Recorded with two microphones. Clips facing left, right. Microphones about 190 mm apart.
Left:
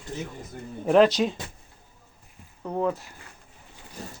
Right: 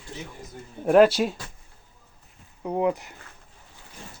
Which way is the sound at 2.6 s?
15° right (ahead or behind).